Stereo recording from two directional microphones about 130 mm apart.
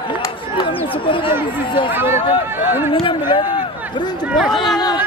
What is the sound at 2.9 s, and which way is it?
Speech, 40° left (ahead or behind).